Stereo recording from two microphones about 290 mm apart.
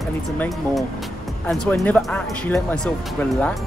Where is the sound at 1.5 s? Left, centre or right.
Centre.